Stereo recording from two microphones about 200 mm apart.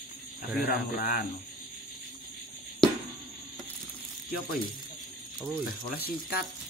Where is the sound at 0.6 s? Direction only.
45° left (ahead or behind).